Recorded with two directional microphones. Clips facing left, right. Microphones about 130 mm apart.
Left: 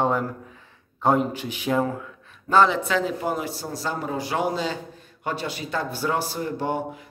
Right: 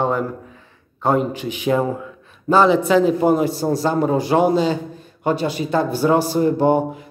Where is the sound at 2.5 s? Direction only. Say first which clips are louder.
Right 5 dB; 10° right (ahead or behind).